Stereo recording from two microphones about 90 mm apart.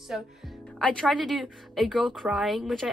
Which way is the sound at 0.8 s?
10° left (ahead or behind).